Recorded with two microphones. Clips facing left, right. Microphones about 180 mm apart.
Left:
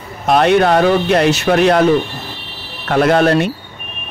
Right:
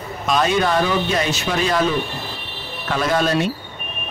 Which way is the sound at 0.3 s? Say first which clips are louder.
Left 7 dB; 65° left (ahead or behind).